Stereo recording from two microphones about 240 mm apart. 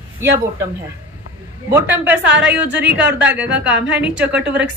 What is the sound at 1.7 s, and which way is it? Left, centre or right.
Speech, centre.